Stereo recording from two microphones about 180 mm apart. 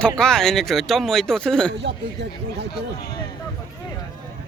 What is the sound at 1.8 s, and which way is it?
Speech, 70° right (ahead or behind).